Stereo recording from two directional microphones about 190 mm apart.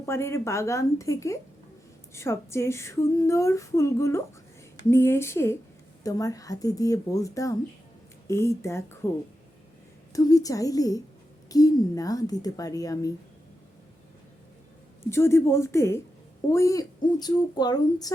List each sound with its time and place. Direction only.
0.0 s female singing: 15° left (ahead or behind)
10.1 s female singing: 20° left (ahead or behind)
11.4 s speech: 20° left (ahead or behind)
15.1 s female singing: 15° left (ahead or behind)
16.5 s speech: 15° left (ahead or behind)